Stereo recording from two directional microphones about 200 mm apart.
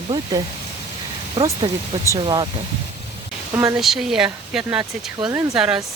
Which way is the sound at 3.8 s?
Centre (ahead or behind).